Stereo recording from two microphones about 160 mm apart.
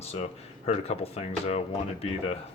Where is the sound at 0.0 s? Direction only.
40° left (ahead or behind).